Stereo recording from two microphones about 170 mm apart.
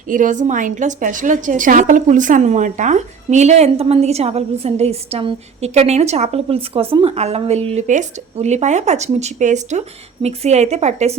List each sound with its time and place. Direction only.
0.1 s a woman's voice: 50° right (ahead or behind)